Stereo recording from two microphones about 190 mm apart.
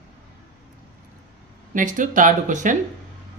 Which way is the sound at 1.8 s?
40° right (ahead or behind).